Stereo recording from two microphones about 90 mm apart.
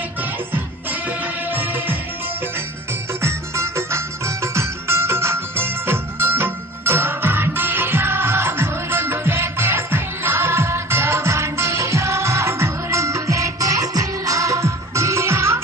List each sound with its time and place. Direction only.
1.0 s music: 20° right (ahead or behind)
3.2 s music: 30° right (ahead or behind)